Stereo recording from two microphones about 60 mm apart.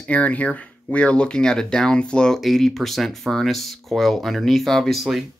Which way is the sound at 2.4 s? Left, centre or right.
Centre.